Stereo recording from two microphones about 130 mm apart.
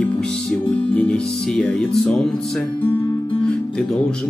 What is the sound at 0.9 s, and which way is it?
Speech, 5° left (ahead or behind).